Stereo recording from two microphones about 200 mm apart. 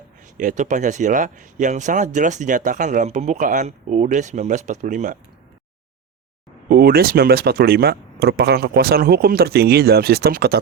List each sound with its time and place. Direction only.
0.3 s speech: 40° right (ahead or behind)
6.7 s speech: 50° right (ahead or behind)